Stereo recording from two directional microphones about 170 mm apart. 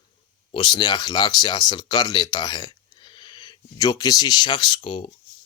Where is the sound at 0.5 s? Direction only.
30° left (ahead or behind).